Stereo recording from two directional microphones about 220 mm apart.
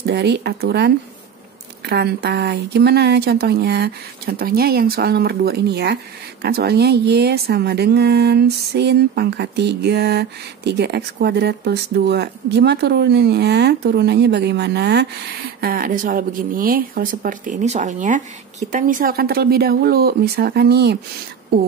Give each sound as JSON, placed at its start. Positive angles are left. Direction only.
{"t": 0.0, "sound": "speech", "side_deg": -50}